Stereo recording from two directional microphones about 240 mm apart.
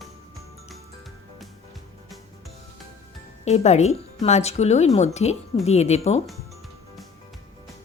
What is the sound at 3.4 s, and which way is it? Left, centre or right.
Speech, left.